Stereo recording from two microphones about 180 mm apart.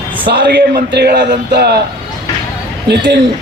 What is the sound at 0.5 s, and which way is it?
A man's voice, 65° right (ahead or behind).